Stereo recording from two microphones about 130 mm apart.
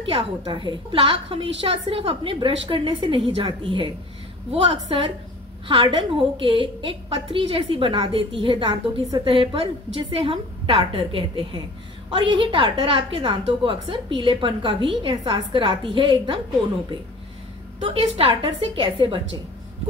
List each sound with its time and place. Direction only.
0.0 s a woman's voice: 45° right (ahead or behind)
17.7 s a woman's voice: 45° right (ahead or behind)